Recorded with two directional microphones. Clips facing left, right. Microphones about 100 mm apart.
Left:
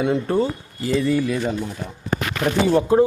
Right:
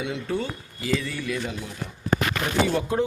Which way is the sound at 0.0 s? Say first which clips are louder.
Left 8 dB; 45° left (ahead or behind).